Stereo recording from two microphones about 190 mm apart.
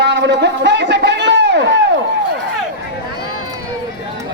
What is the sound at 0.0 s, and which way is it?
Speech, 65° right (ahead or behind).